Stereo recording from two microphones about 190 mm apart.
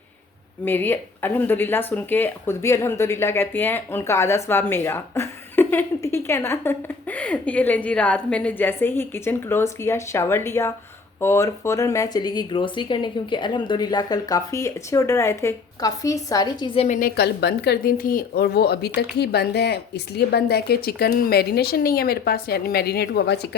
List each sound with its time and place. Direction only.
0.6 s speech: 10° left (ahead or behind); by 17.1 s 40° left (ahead or behind)
17.2 s speech: 60° left (ahead or behind)